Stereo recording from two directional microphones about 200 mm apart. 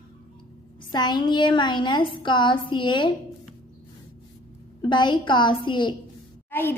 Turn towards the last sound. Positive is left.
turn(degrees=10)  # may be behind; listen again after turning